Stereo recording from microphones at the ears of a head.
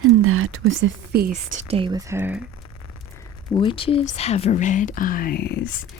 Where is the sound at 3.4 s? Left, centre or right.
Left.